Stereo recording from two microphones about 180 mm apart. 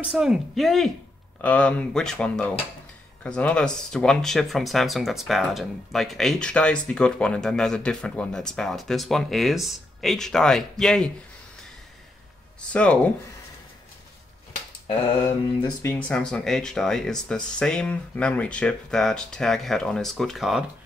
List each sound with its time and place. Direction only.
0.0 s speech: 5° right (ahead or behind)
12.7 s speech: 5° left (ahead or behind)
14.9 s mantra: 25° left (ahead or behind)
15.8 s speech: 10° left (ahead or behind)